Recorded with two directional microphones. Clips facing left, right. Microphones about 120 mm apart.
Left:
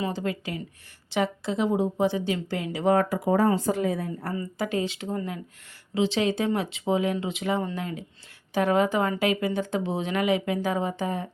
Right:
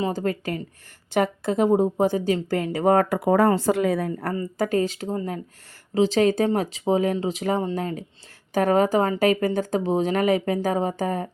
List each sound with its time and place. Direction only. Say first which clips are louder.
0.0 s speech: right 4 dB; 45° right (ahead or behind); by 4.4 s 60° right (ahead or behind)
4.4 s speech: right 5 dB; 45° right (ahead or behind)